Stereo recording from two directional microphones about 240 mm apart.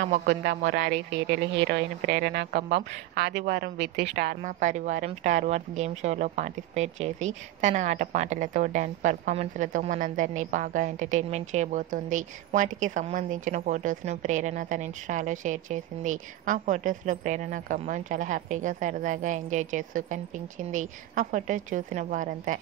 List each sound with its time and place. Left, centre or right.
0.0 s a woman's voice: right